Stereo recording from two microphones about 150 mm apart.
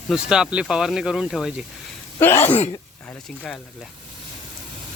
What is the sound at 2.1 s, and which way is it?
Speech, 15° left (ahead or behind).